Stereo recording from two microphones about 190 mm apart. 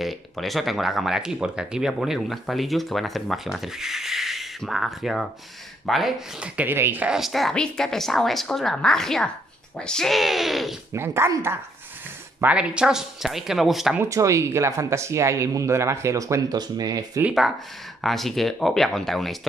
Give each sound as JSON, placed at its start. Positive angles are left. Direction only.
{"t": 0.0, "sound": "speech", "side_deg": 0}
{"t": 10.9, "sound": "speech", "side_deg": -15}
{"t": 14.0, "sound": "speech", "side_deg": -15}
{"t": 18.0, "sound": "speech", "side_deg": 0}